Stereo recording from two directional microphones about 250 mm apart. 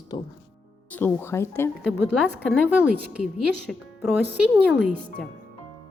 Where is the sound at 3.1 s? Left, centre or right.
Centre.